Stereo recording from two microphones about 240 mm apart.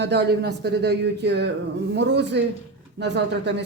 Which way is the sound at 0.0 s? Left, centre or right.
Right.